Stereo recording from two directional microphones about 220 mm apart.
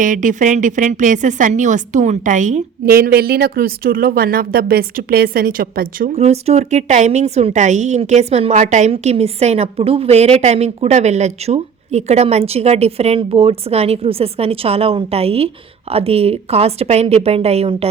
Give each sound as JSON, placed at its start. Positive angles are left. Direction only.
{"t": 0.0, "sound": "a woman's voice", "side_deg": -35}